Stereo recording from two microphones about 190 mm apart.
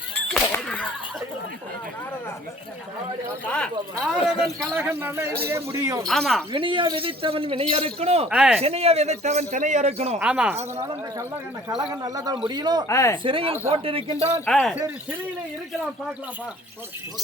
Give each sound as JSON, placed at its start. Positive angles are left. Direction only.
{"t": 0.5, "sound": "a sound", "side_deg": 10}
{"t": 3.4, "sound": "speech", "side_deg": 5}
{"t": 4.2, "sound": "speech", "side_deg": 30}
{"t": 4.7, "sound": "a man's voice", "side_deg": -10}
{"t": 6.1, "sound": "speech", "side_deg": 0}
{"t": 6.5, "sound": "a man's voice", "side_deg": -25}
{"t": 8.3, "sound": "speech", "side_deg": -5}
{"t": 8.6, "sound": "a man's voice", "side_deg": -30}
{"t": 10.2, "sound": "speech", "side_deg": -5}
{"t": 11.7, "sound": "speech", "side_deg": -5}
{"t": 12.0, "sound": "speech", "side_deg": -20}
{"t": 12.9, "sound": "speech", "side_deg": 15}
{"t": 13.2, "sound": "speech", "side_deg": -30}
{"t": 14.4, "sound": "speech", "side_deg": 5}